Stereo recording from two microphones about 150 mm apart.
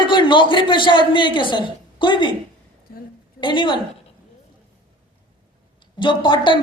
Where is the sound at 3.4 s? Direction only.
30° left (ahead or behind).